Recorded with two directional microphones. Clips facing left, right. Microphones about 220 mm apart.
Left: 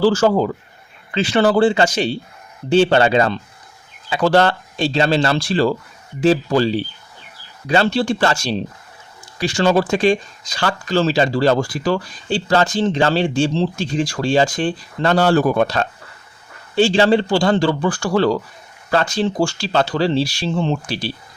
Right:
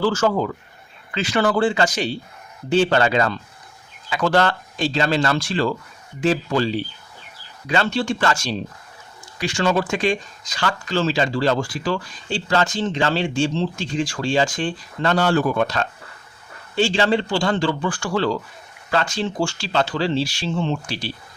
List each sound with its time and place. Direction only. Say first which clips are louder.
0.0 s speech: left 5 dB; 30° left (ahead or behind)